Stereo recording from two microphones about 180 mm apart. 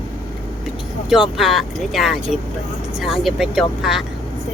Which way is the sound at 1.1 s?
Centre (ahead or behind).